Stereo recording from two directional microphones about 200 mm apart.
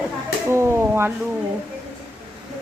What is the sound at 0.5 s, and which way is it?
Speech, 15° right (ahead or behind).